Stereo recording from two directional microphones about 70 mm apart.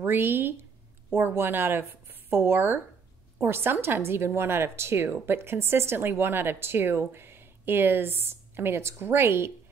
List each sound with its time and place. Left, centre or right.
0.0 s a woman's voice: right